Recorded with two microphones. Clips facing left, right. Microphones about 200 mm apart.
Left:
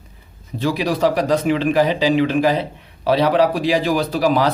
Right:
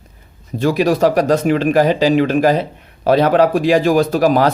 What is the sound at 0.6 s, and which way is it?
A man's voice, 50° right (ahead or behind).